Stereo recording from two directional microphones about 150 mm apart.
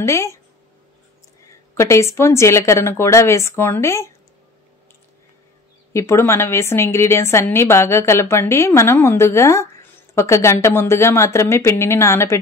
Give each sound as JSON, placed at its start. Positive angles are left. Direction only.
{"t": 0.0, "sound": "a woman's voice", "side_deg": 20}
{"t": 1.8, "sound": "a woman's voice", "side_deg": 20}
{"t": 5.9, "sound": "a woman's voice", "side_deg": 20}